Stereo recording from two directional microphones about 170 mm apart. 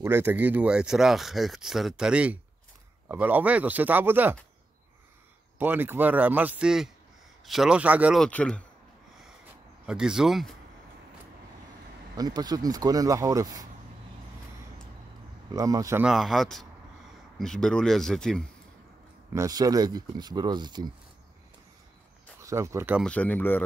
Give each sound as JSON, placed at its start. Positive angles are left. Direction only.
{"t": 0.0, "sound": "speech", "side_deg": -10}
{"t": 5.6, "sound": "speech", "side_deg": -10}
{"t": 8.2, "sound": "speech", "side_deg": 5}
{"t": 9.8, "sound": "speech", "side_deg": -5}
{"t": 12.2, "sound": "speech", "side_deg": -25}
{"t": 15.5, "sound": "speech", "side_deg": -20}
{"t": 16.0, "sound": "speech", "side_deg": 0}
{"t": 19.3, "sound": "speech", "side_deg": -20}
{"t": 22.4, "sound": "speech", "side_deg": -20}
{"t": 23.0, "sound": "speech", "side_deg": 10}